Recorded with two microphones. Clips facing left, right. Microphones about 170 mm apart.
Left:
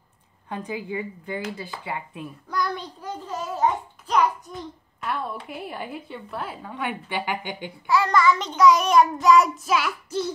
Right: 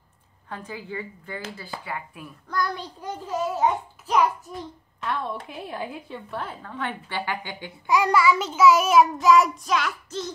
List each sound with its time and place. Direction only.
0.5 s a woman's voice: 15° left (ahead or behind)
3.0 s a child's voice: 10° right (ahead or behind); by 7.7 s 15° left (ahead or behind)
7.8 s child singing: 15° right (ahead or behind); by 10.3 s 10° left (ahead or behind)